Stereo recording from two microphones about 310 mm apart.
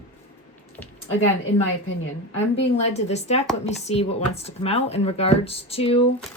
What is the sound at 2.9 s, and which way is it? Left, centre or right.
Speech, left.